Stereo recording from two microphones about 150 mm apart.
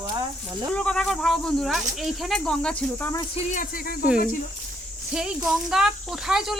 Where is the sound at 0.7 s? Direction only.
5° left (ahead or behind).